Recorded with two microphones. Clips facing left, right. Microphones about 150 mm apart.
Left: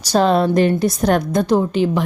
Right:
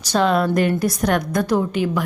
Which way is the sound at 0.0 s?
35° left (ahead or behind).